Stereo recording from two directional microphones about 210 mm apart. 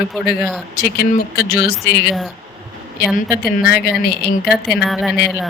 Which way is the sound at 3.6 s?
50° left (ahead or behind).